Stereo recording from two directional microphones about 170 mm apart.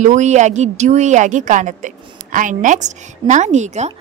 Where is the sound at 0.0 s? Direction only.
45° right (ahead or behind).